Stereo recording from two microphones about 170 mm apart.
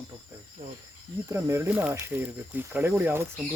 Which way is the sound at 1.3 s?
15° right (ahead or behind).